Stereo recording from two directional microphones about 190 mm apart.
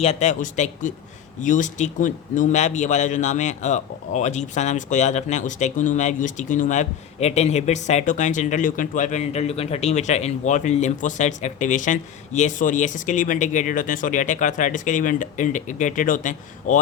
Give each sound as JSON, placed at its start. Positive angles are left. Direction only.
{"t": 0.0, "sound": "a man's voice", "side_deg": 35}